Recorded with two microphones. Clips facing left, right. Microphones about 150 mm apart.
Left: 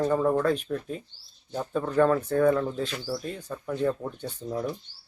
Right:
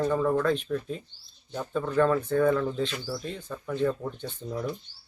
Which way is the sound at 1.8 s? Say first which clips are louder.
Left 1 dB; 15° left (ahead or behind).